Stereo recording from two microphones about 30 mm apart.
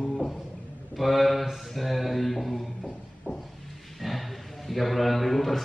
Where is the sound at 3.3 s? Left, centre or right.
Right.